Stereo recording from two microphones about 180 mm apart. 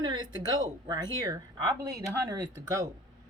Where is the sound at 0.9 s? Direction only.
20° right (ahead or behind).